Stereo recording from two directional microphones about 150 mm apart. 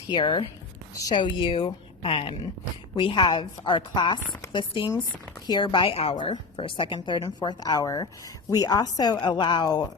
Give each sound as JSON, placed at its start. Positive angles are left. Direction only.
{"t": 0.1, "sound": "speech", "side_deg": 30}